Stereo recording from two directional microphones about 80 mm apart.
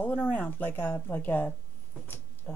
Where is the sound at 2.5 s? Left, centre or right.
Centre.